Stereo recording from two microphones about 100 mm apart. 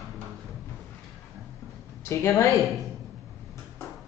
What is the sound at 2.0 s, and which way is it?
Speech, 30° left (ahead or behind).